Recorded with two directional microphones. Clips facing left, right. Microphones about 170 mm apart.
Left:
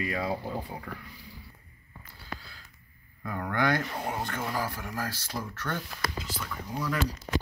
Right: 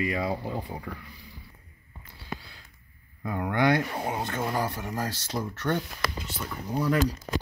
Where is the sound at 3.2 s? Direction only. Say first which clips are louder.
Right 4 dB; 15° right (ahead or behind).